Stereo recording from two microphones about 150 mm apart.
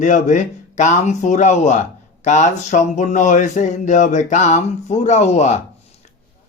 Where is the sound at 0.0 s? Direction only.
55° left (ahead or behind).